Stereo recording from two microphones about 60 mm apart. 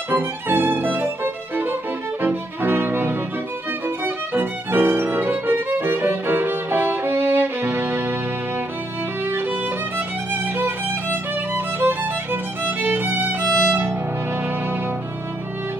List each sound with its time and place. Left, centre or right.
0.1 s violin: right
2.2 s brass instrument: right
3.8 s violin: right
9.2 s music: right